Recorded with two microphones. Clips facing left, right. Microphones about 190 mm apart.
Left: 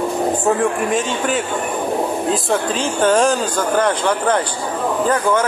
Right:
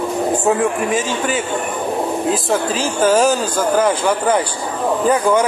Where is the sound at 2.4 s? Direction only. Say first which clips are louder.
Right 1 dB; 5° right (ahead or behind).